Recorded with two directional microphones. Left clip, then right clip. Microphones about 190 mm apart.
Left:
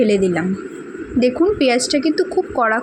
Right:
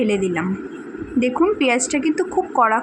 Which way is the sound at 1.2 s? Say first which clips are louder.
Left 2 dB; 25° left (ahead or behind).